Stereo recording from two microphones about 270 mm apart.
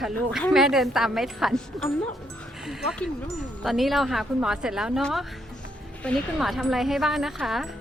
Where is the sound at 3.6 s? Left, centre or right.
Centre.